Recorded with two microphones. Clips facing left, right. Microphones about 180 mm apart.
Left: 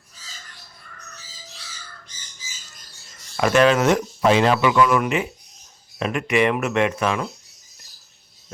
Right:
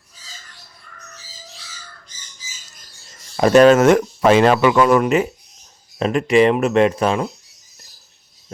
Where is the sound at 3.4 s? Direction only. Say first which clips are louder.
Right 6 dB; 35° right (ahead or behind).